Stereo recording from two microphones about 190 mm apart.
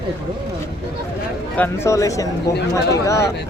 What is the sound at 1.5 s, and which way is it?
Speech, 10° left (ahead or behind).